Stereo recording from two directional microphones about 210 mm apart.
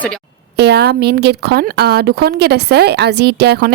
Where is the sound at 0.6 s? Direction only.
50° right (ahead or behind).